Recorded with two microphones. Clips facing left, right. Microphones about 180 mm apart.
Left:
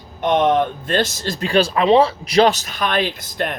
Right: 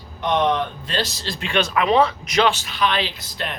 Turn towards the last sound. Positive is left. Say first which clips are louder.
# left 6 dB
turn(degrees=50)  # may be behind; listen again after turning